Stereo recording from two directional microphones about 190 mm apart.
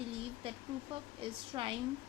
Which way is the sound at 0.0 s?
30° right (ahead or behind).